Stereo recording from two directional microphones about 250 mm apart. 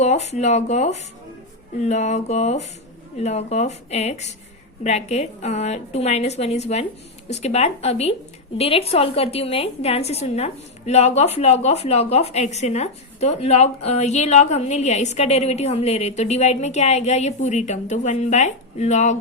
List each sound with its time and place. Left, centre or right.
0.0 s a woman's voice: left